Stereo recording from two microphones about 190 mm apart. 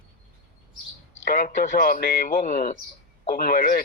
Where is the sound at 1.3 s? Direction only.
40° left (ahead or behind).